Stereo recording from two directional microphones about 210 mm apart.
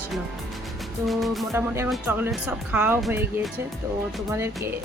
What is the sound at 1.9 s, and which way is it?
Speech, centre (ahead or behind).